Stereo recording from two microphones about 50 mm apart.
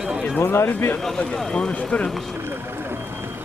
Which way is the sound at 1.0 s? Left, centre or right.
Centre.